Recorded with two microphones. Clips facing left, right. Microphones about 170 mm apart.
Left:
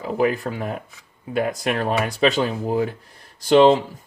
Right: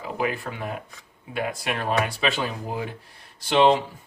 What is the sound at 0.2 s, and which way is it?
Speech, 40° left (ahead or behind).